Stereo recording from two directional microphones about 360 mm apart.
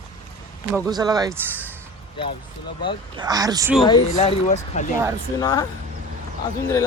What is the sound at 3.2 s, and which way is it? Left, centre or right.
Speech, centre.